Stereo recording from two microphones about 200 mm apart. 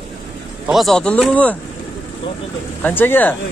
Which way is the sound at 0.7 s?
Centre (ahead or behind).